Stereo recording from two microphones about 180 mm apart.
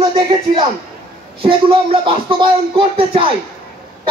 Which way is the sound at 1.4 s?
30° right (ahead or behind).